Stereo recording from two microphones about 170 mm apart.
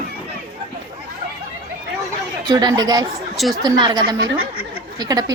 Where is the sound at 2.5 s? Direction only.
25° right (ahead or behind).